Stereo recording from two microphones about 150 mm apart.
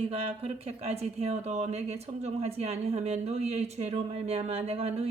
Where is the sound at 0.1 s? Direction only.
45° right (ahead or behind).